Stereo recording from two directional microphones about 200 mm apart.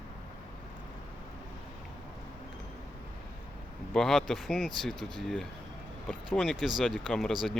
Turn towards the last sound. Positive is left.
turn(degrees=0)  # may be behind; listen again after turning